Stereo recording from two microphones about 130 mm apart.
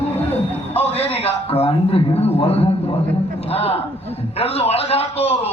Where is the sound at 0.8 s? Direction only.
50° left (ahead or behind).